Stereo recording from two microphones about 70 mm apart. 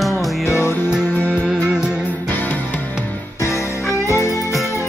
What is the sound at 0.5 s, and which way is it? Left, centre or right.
Music, left.